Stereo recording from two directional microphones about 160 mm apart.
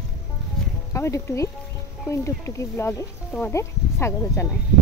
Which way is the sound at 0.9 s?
15° left (ahead or behind).